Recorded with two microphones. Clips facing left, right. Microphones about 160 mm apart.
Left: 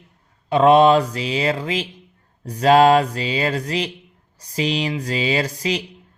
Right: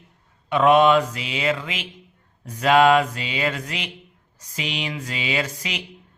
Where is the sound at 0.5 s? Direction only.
30° left (ahead or behind).